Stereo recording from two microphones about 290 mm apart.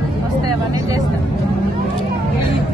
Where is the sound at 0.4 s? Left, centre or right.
Right.